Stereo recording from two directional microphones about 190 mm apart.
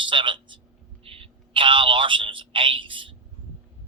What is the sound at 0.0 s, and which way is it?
A man's voice, 25° right (ahead or behind).